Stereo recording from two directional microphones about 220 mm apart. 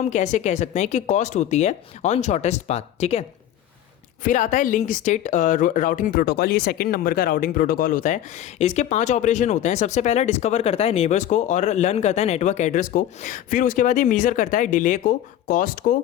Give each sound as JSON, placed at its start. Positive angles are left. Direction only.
{"t": 0.0, "sound": "speech", "side_deg": 35}